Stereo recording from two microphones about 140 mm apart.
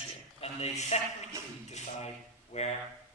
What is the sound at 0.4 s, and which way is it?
Speech, 50° left (ahead or behind).